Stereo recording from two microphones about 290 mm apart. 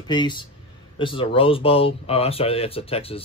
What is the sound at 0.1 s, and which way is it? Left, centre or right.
Speech, centre.